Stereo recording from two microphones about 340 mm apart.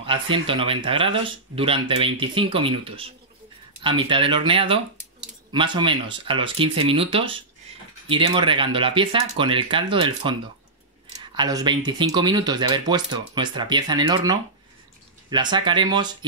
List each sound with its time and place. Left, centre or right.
0.0 s speech: centre
11.3 s speech: centre